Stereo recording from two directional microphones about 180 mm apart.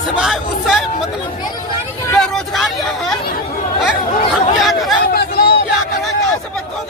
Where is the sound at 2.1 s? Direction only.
Centre (ahead or behind).